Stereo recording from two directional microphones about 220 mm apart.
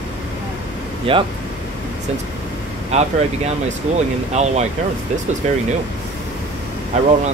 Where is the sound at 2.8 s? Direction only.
30° right (ahead or behind).